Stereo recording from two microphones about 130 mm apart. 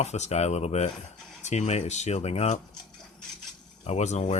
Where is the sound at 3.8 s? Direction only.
60° left (ahead or behind).